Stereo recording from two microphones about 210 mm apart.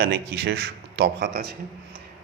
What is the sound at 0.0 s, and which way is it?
A man's voice, 50° right (ahead or behind).